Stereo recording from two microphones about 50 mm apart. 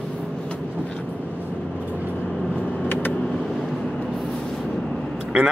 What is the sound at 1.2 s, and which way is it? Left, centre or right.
Vehicle, right.